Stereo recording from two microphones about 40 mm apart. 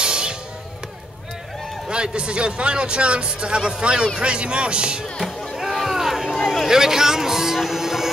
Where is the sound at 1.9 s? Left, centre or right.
Right.